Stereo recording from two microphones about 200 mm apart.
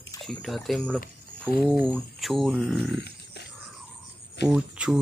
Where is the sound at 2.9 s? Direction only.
55° left (ahead or behind).